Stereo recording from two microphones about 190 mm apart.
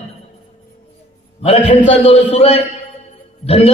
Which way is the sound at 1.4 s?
30° left (ahead or behind).